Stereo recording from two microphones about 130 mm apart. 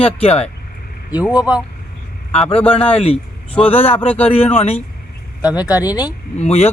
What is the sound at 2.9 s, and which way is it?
Speech, 50° left (ahead or behind).